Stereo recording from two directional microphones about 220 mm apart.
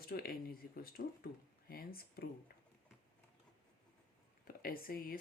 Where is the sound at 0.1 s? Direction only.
45° left (ahead or behind).